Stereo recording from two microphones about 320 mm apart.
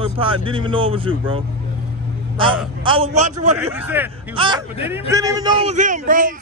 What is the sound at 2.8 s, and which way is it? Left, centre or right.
Speech, centre.